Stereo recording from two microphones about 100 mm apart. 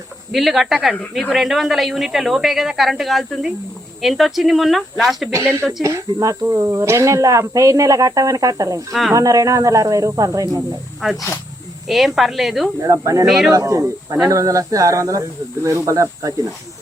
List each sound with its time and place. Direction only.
0.3 s speech: centre (ahead or behind)
5.3 s speech: 25° right (ahead or behind)
8.9 s speech: centre (ahead or behind)
9.1 s speech: 35° right (ahead or behind)
11.9 s speech: centre (ahead or behind)
12.8 s speech: 35° right (ahead or behind)
13.2 s speech: centre (ahead or behind)
13.5 s speech: 30° right (ahead or behind)